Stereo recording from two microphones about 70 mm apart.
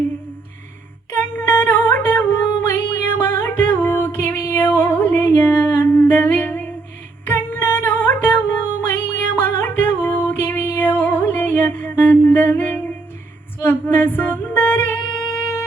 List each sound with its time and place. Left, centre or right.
1.1 s humming: left
7.3 s music: left
13.8 s music: left